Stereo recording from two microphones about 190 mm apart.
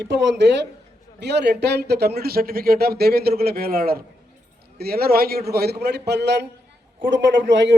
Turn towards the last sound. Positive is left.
turn(degrees=-70)  # may be behind; listen again after turning